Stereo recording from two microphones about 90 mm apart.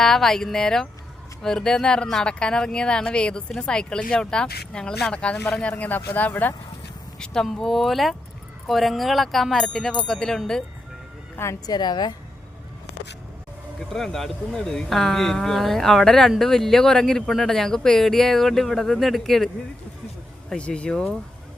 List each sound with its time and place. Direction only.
0.0 s speech: 5° left (ahead or behind); by 6.5 s 20° left (ahead or behind)
7.2 s speech: 5° left (ahead or behind)
11.6 s a woman's voice: 50° left (ahead or behind)
13.7 s speech: 5° left (ahead or behind)
20.5 s speech: 10° left (ahead or behind)